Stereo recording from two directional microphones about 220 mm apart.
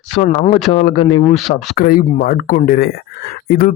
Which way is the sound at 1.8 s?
40° left (ahead or behind).